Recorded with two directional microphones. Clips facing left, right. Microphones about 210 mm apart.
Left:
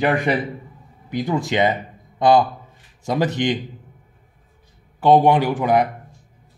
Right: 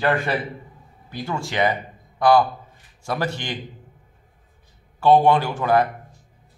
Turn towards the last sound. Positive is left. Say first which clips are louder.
# left 2 dB
turn(degrees=15)  # may be behind; listen again after turning